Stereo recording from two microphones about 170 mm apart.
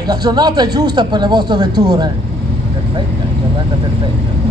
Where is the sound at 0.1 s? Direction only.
25° right (ahead or behind).